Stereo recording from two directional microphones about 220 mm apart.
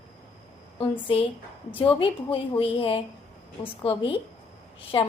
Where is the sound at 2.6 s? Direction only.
25° left (ahead or behind).